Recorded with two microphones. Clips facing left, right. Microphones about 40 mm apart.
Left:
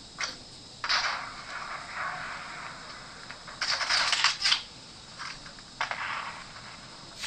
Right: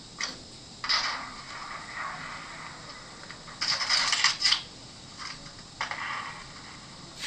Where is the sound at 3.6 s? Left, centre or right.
Left.